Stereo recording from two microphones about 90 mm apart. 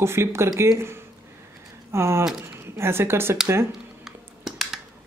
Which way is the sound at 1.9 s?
30° right (ahead or behind).